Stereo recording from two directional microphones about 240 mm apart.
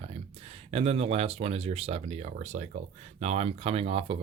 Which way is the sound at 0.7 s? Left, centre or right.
Right.